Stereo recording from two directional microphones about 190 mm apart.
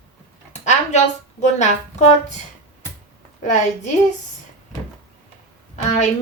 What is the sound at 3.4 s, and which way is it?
Speech, 40° left (ahead or behind).